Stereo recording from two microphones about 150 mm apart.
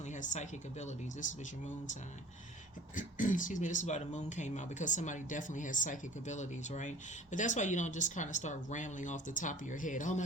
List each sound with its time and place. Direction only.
0.1 s speech: 55° left (ahead or behind)
2.9 s speech: 60° left (ahead or behind)